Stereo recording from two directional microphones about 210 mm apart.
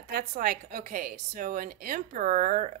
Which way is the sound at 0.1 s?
45° right (ahead or behind).